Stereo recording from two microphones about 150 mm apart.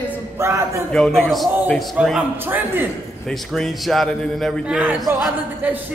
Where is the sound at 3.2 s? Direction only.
Centre (ahead or behind).